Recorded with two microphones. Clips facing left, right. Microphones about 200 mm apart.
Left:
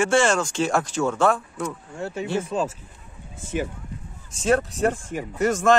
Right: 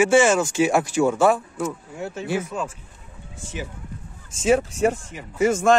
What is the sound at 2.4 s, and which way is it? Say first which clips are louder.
Speech: left 3 dB; 30° left (ahead or behind).